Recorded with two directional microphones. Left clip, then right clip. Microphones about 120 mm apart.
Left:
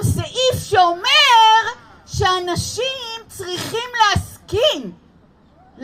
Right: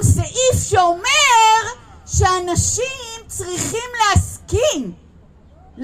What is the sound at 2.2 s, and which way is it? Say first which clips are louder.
Music: right 1 dB; 45° right (ahead or behind).